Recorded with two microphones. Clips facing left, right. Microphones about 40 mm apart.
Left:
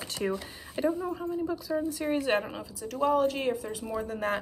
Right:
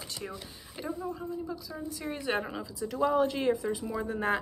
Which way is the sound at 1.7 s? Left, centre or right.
Left.